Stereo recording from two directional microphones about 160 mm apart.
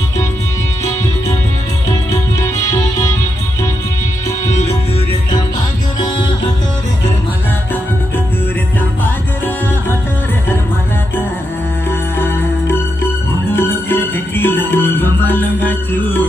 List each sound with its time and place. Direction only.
2.4 s music: 20° left (ahead or behind)
12.2 s music: 15° left (ahead or behind)